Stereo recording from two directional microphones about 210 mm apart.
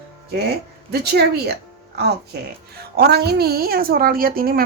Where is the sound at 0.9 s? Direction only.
50° right (ahead or behind).